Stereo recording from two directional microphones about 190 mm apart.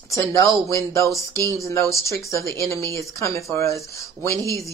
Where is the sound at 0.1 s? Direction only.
15° left (ahead or behind).